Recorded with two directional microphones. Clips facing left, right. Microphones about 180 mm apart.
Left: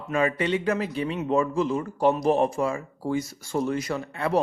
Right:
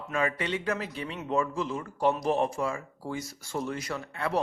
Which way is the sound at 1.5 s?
45° left (ahead or behind).